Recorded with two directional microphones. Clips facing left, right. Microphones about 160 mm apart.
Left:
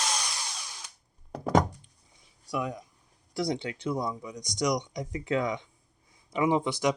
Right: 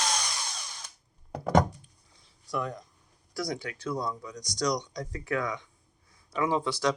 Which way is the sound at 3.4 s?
25° left (ahead or behind).